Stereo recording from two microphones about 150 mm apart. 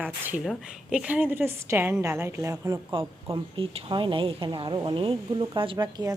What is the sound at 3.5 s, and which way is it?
A woman's voice, 30° right (ahead or behind).